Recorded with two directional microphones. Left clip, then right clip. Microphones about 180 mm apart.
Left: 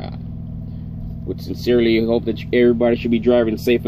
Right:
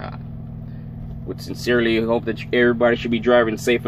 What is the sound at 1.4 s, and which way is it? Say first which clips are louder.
Speech: left 2 dB; 25° right (ahead or behind).